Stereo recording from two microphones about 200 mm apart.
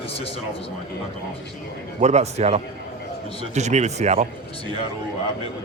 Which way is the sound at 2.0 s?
35° right (ahead or behind).